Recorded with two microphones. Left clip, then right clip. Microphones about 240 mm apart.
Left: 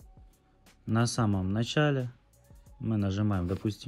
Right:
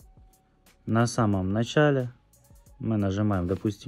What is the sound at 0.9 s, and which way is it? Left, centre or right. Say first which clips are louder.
Speech: right 5 dB; right.